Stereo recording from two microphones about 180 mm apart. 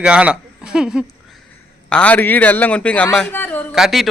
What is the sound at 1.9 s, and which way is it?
Speech, 5° left (ahead or behind).